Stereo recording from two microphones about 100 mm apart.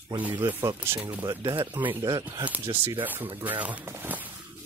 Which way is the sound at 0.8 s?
20° right (ahead or behind).